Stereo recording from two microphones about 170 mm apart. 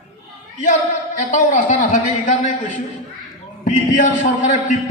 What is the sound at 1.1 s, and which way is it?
A man's voice, 45° left (ahead or behind).